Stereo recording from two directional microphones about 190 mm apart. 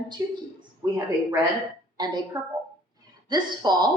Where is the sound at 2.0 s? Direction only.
25° right (ahead or behind).